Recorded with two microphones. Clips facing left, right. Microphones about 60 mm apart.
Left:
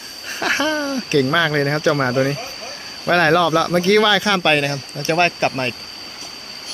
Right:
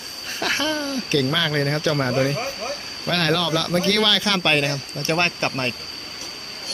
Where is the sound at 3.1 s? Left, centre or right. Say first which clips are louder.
Left 7 dB; left.